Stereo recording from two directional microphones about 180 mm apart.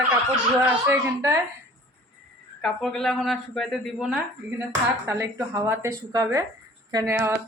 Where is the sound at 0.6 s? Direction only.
10° right (ahead or behind).